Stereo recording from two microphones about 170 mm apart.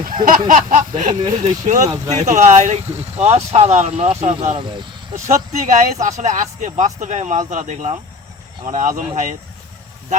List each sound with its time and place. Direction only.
0.3 s speech: 55° right (ahead or behind); by 5.2 s 30° right (ahead or behind)
5.2 s speech: 45° right (ahead or behind)